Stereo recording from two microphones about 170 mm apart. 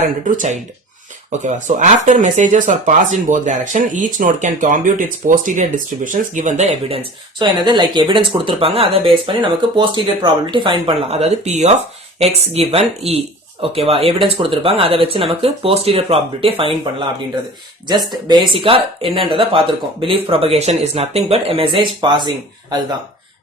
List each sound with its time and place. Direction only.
0.3 s speech: 45° right (ahead or behind)
18.3 s speech: 30° right (ahead or behind)